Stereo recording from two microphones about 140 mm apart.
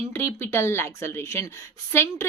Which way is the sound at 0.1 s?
15° left (ahead or behind).